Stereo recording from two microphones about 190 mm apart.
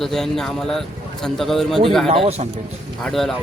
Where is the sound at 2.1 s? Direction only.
30° right (ahead or behind).